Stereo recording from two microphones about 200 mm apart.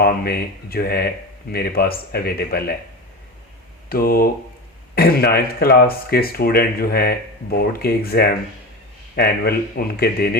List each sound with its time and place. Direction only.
0.0 s speech: 50° left (ahead or behind)
3.8 s speech: 50° left (ahead or behind)